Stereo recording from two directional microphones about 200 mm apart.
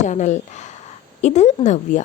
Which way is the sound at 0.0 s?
35° left (ahead or behind).